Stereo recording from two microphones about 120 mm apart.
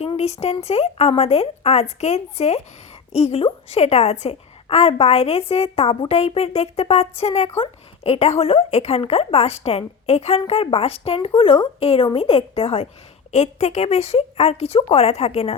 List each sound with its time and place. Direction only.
0.2 s a woman's voice: 65° left (ahead or behind)
13.3 s a woman's voice: 70° left (ahead or behind)